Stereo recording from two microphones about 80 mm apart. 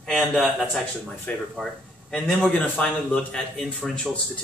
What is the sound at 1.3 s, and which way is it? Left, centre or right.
Speech, centre.